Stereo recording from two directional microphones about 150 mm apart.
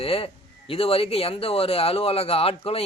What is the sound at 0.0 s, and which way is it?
Speech, 40° left (ahead or behind).